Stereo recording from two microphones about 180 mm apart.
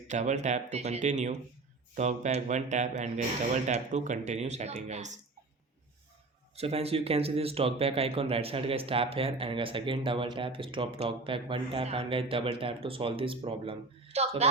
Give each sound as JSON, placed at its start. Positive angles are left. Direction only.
{"t": 0.1, "sound": "speech", "side_deg": -40}
{"t": 6.6, "sound": "speech", "side_deg": -35}